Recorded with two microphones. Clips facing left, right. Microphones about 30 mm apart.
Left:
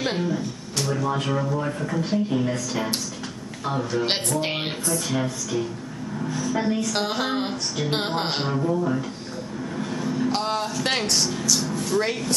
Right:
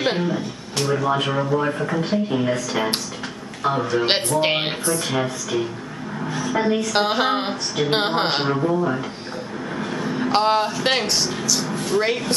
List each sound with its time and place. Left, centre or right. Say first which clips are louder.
0.0 s speech: right 3 dB; right
11.6 s speech: right 3 dB; right